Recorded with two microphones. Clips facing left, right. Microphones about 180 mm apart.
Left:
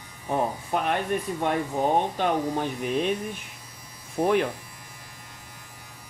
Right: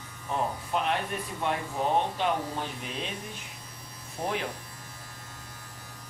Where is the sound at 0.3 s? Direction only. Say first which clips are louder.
Left 4 dB; 50° left (ahead or behind).